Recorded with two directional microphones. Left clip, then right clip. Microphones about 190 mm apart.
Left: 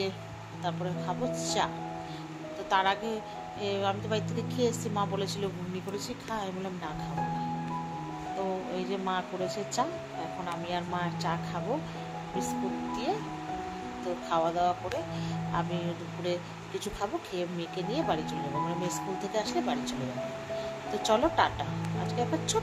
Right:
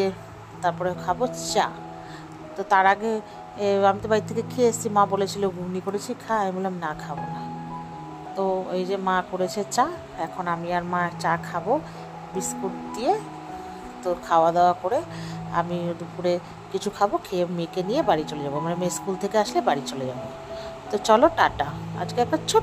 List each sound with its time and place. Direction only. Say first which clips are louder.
0.6 s speech: right 10 dB; 40° right (ahead or behind)
2.7 s speech: right 9 dB; 40° right (ahead or behind)
8.4 s speech: right 10 dB; 40° right (ahead or behind)
10.4 s speech: right 9 dB; 30° right (ahead or behind)